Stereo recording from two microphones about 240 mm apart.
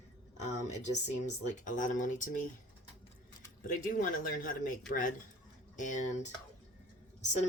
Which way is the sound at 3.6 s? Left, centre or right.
Left.